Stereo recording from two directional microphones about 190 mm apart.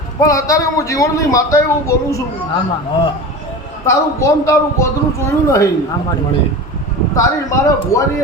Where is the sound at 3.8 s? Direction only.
15° left (ahead or behind).